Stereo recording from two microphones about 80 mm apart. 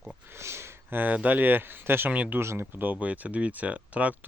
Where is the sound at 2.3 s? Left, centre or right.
Right.